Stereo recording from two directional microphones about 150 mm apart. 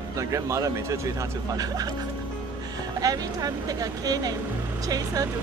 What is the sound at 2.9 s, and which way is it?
Speech, 25° right (ahead or behind).